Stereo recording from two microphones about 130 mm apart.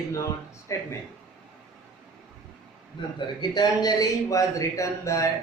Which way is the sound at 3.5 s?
30° left (ahead or behind).